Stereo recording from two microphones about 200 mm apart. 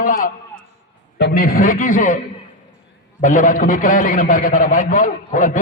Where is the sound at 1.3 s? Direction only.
45° left (ahead or behind).